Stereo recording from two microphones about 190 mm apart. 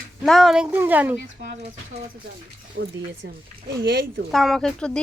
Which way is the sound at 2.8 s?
65° right (ahead or behind).